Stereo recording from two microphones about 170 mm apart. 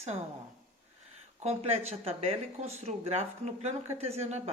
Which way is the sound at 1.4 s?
40° right (ahead or behind).